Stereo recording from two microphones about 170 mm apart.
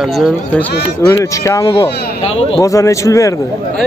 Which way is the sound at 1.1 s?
15° left (ahead or behind).